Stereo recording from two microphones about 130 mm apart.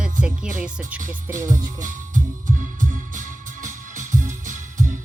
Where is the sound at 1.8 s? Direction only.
80° right.